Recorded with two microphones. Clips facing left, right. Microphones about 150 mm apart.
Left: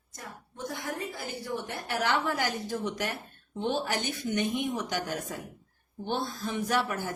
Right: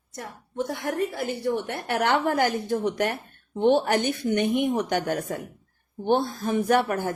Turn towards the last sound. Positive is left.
turn(degrees=-55)  # may be behind; listen again after turning